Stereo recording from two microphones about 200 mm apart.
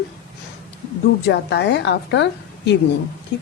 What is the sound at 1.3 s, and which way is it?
Speech, 55° left (ahead or behind).